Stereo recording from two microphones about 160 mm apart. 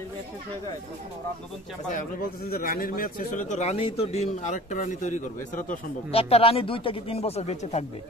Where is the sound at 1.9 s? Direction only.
65° left (ahead or behind).